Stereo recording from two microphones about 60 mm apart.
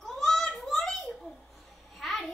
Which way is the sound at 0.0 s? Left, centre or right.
Centre.